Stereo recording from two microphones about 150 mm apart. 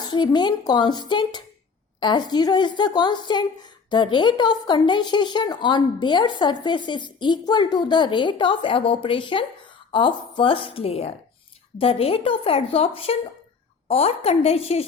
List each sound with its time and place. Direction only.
0.0 s a woman's voice: 30° left (ahead or behind)